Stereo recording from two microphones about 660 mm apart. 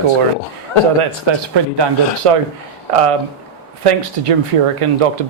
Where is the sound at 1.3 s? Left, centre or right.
Right.